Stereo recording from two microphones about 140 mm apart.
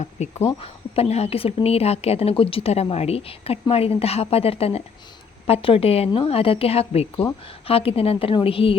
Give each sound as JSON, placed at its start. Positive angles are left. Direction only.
{"t": 0.0, "sound": "speech", "side_deg": 55}